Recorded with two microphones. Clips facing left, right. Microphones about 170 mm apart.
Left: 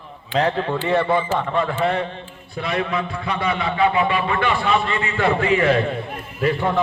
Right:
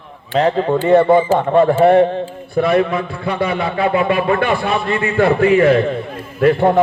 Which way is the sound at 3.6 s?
35° right (ahead or behind).